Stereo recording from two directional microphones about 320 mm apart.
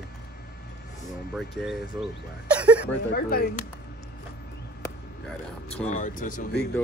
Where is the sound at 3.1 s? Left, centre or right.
Left.